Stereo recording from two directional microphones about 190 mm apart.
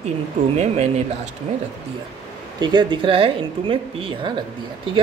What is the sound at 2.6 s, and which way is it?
A man's voice, 25° right (ahead or behind).